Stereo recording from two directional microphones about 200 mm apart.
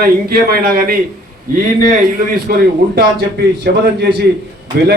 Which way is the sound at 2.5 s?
45° right (ahead or behind).